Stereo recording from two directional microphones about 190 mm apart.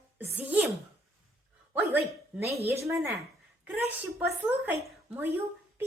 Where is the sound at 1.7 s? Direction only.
15° right (ahead or behind).